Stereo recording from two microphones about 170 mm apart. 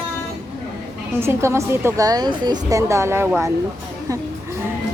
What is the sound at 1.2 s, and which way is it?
A woman's voice, 15° right (ahead or behind).